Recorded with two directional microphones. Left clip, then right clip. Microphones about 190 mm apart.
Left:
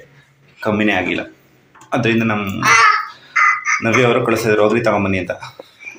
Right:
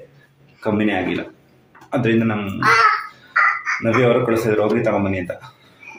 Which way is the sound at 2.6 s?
20° right (ahead or behind).